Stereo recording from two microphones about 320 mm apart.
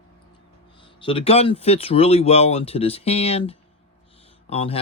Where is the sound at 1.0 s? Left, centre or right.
Centre.